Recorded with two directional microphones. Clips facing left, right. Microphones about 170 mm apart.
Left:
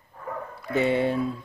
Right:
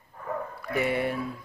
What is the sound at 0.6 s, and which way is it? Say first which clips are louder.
Speech: left 5 dB; 25° left (ahead or behind).